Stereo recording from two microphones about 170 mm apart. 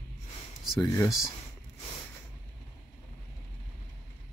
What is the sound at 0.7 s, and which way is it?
Speech, 20° left (ahead or behind).